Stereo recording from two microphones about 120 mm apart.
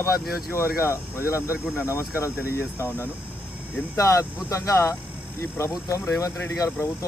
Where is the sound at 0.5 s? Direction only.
25° left (ahead or behind).